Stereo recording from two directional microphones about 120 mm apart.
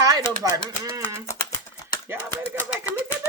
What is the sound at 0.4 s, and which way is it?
Speech, 30° right (ahead or behind).